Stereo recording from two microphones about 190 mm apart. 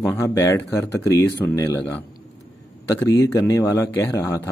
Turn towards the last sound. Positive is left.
turn(degrees=15)  # may be behind; listen again after turning